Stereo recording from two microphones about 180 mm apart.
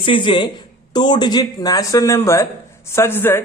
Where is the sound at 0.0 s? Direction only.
30° left (ahead or behind).